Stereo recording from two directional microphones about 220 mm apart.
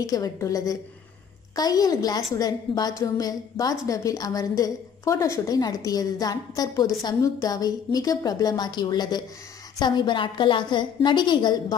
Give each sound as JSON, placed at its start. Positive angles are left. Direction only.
{"t": 0.0, "sound": "a woman's voice", "side_deg": 15}